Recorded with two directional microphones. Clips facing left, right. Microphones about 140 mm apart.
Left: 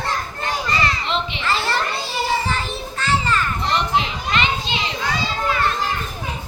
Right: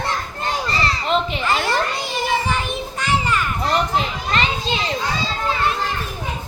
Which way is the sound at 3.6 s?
40° right (ahead or behind).